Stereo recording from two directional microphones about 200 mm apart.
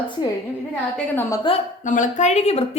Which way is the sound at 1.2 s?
15° left (ahead or behind).